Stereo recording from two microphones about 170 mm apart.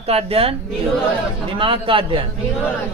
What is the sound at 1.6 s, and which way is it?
Speech, 30° right (ahead or behind).